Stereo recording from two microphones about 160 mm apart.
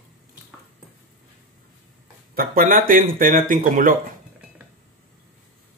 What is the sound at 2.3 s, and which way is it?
Speech, 60° right (ahead or behind).